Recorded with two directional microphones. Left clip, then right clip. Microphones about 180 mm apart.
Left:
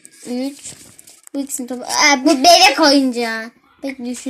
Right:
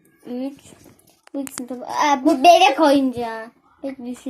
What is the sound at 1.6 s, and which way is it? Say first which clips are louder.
A woman's voice: left 5 dB; 30° left (ahead or behind).